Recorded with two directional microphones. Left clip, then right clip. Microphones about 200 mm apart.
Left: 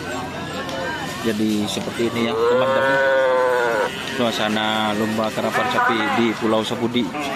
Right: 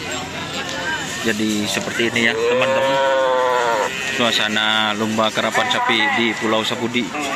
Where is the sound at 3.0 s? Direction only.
50° left (ahead or behind).